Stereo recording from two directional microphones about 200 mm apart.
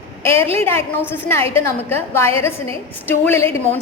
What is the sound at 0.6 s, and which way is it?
A woman's voice, 10° left (ahead or behind).